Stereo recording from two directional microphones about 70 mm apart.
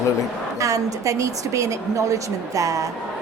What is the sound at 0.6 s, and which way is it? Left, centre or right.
A woman's voice, right.